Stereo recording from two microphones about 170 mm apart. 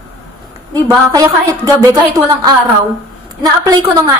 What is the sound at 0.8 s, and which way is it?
A woman's voice, 20° right (ahead or behind).